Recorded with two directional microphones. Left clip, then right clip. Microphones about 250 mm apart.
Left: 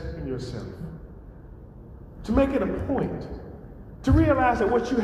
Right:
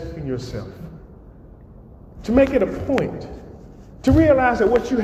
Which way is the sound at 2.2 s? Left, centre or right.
Right.